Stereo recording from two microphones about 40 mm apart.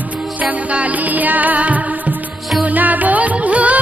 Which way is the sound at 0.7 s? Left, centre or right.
Right.